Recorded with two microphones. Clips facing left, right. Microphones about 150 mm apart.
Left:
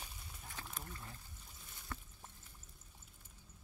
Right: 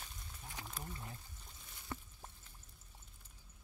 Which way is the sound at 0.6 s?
15° right (ahead or behind).